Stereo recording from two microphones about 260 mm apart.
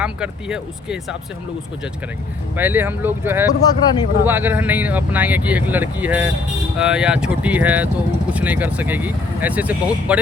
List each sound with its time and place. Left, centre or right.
0.0 s speech: centre
2.6 s speech: centre
3.6 s speech: centre
4.3 s speech: centre